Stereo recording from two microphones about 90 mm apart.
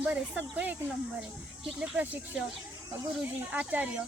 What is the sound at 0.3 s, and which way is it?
Speech, 20° right (ahead or behind).